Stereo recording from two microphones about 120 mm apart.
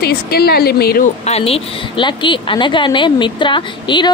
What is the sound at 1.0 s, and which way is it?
Speech, 65° left (ahead or behind).